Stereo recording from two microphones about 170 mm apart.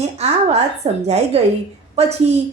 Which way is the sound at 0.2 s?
40° right (ahead or behind).